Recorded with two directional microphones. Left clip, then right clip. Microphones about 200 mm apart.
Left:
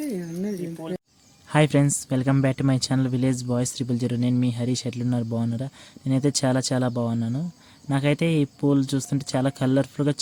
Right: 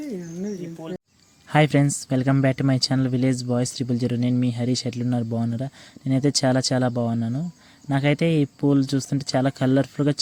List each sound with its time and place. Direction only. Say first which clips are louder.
0.0 s bird: left 2 dB; 45° left (ahead or behind)
1.5 s speech: right 1 dB; 10° right (ahead or behind)